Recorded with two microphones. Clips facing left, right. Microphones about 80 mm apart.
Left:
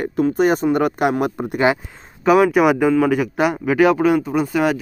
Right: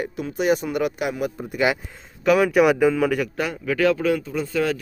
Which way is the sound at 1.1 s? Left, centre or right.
Left.